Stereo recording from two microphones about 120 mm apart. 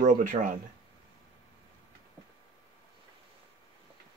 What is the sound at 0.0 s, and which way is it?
Speech, 90° right.